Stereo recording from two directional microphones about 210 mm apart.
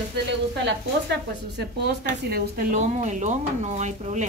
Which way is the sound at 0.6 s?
55° right (ahead or behind).